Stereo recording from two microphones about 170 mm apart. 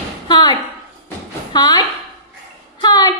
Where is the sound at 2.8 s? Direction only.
25° left (ahead or behind).